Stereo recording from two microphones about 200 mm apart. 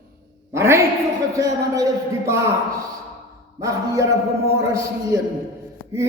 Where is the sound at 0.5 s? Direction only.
15° right (ahead or behind).